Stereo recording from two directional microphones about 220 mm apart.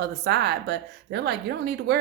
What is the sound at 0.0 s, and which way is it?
Speech, 50° right (ahead or behind).